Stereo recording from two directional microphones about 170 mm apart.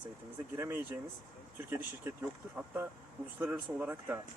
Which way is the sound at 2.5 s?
10° right (ahead or behind).